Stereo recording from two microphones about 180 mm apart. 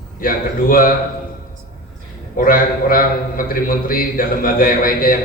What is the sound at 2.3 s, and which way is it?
A man's voice, 50° left (ahead or behind).